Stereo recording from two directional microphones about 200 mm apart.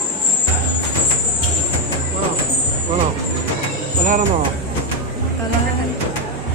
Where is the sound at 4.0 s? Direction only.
40° right (ahead or behind).